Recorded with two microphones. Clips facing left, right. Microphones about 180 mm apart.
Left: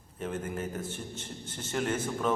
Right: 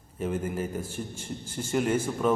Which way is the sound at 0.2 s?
10° right (ahead or behind).